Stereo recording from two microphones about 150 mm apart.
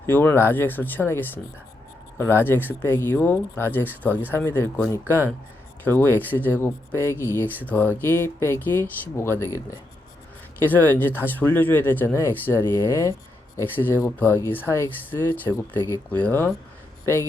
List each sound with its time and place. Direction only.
0.0 s speech: 15° left (ahead or behind)